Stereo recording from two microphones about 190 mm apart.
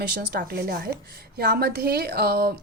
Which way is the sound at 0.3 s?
55° right (ahead or behind).